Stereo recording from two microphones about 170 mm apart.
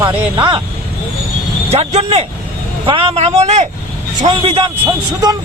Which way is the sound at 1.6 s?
40° right (ahead or behind).